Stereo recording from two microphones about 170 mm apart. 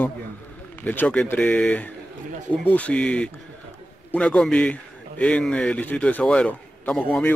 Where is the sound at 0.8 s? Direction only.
10° left (ahead or behind).